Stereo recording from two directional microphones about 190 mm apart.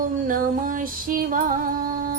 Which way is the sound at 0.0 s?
45° right (ahead or behind).